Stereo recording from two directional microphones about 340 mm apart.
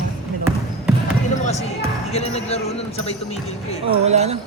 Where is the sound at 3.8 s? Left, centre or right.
Centre.